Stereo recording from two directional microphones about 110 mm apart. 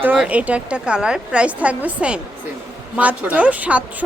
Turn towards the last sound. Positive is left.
turn(degrees=-15)  # may be behind; listen again after turning